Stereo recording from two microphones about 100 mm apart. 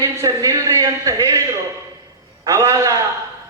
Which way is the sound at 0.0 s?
35° right (ahead or behind).